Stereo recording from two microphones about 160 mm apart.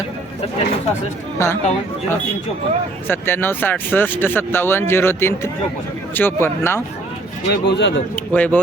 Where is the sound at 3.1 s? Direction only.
10° left (ahead or behind).